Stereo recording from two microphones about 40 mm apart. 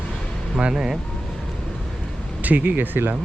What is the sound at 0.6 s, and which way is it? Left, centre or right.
Speech, centre.